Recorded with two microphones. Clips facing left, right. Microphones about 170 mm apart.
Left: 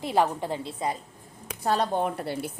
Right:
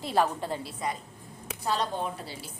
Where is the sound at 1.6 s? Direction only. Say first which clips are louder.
Left 5 dB; 50° left (ahead or behind).